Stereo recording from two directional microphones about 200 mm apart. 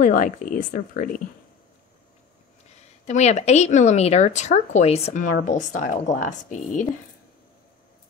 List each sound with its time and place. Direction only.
0.0 s speech: 40° left (ahead or behind)
2.7 s a woman's voice: 35° left (ahead or behind)